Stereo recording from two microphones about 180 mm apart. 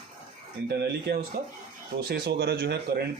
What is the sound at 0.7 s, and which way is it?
A man's voice, 65° right (ahead or behind).